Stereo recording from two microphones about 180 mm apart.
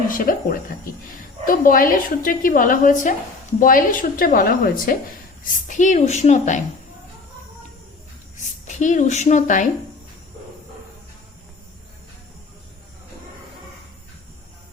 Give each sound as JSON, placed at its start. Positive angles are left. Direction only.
{"t": 0.1, "sound": "a woman's voice", "side_deg": 50}
{"t": 8.6, "sound": "a woman's voice", "side_deg": 45}